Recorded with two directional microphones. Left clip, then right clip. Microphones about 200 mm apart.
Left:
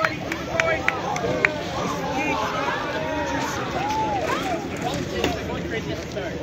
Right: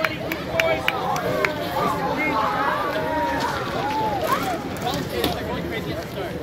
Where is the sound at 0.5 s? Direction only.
40° right (ahead or behind).